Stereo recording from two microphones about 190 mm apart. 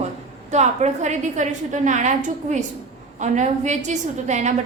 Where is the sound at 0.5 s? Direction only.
40° right (ahead or behind).